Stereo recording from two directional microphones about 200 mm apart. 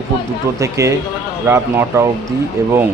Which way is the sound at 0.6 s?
15° right (ahead or behind).